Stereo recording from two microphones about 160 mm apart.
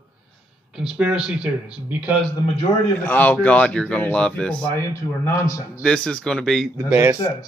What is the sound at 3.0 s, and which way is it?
Speech, 10° left (ahead or behind).